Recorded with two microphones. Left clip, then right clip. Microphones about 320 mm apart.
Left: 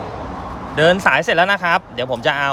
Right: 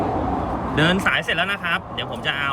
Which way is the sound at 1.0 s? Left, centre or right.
Centre.